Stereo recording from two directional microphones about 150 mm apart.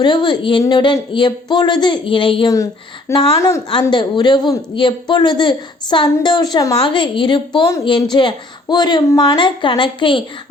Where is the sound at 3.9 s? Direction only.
30° left (ahead or behind).